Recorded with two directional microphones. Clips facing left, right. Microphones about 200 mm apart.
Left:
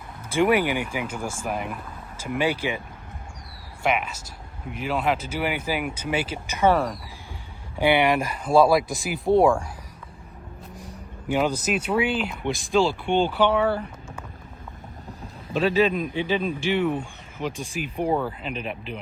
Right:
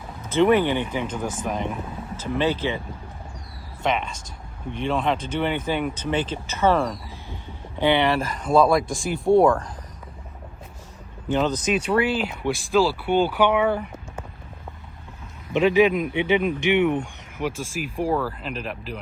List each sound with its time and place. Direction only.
0.3 s speech: 10° left (ahead or behind)
3.8 s speech: 5° left (ahead or behind)
8.5 s speech: centre (ahead or behind)
11.3 s speech: 10° left (ahead or behind); by 13.7 s 10° right (ahead or behind)
15.5 s a man's voice: 15° right (ahead or behind)
16.7 s speech: 65° right (ahead or behind)
17.0 s vehicle: 15° right (ahead or behind)
17.6 s speech: centre (ahead or behind)
18.1 s speech: 20° left (ahead or behind)
18.4 s speech: centre (ahead or behind)